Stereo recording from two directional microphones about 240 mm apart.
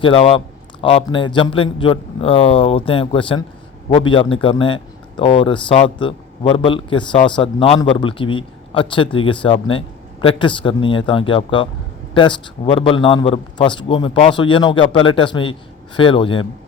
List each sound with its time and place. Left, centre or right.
0.0 s a man's voice: left